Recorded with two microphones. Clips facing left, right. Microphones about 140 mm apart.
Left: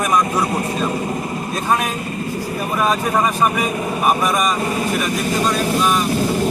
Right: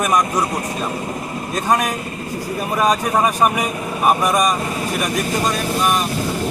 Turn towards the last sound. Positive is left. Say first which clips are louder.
# left 2 dB
turn(degrees=-15)  # may be behind; listen again after turning